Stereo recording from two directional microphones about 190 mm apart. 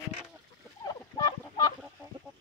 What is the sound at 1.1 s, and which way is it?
Fowl, 20° left (ahead or behind).